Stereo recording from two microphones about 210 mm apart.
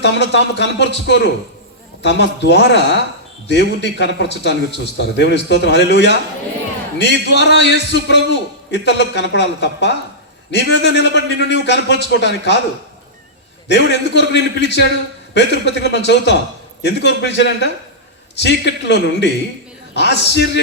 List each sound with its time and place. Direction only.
0.0 s a man's voice: 55° left (ahead or behind)
13.7 s a man's voice: 55° left (ahead or behind)